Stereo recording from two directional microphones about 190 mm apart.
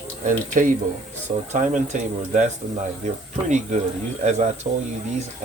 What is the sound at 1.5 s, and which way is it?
Speech, 40° right (ahead or behind).